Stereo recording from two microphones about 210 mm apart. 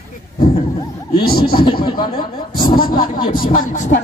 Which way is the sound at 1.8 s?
20° left (ahead or behind).